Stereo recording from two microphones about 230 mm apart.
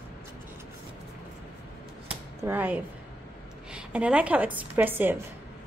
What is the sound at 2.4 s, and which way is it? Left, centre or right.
A woman's voice, centre.